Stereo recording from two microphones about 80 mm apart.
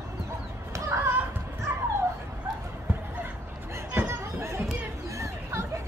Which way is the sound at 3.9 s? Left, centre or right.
Right.